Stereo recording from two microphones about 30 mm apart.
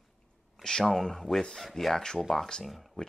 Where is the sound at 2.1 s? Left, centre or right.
Centre.